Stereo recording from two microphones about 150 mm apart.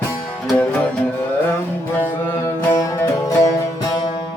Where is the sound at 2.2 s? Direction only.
20° left (ahead or behind).